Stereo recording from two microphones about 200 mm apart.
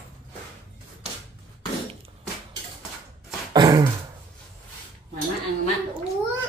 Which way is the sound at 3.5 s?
25° right (ahead or behind).